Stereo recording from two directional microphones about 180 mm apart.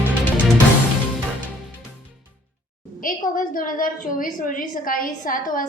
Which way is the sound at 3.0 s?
50° left (ahead or behind).